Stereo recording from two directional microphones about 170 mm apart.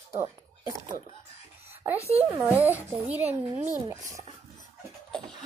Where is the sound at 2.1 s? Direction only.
10° right (ahead or behind).